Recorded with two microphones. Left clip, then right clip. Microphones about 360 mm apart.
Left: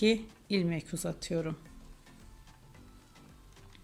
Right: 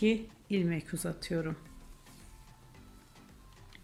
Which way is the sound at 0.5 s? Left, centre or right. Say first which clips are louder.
Left 1 dB; centre.